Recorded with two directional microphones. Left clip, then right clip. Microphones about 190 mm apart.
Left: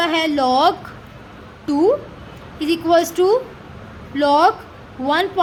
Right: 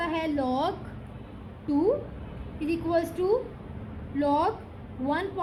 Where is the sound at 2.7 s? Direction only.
40° left (ahead or behind).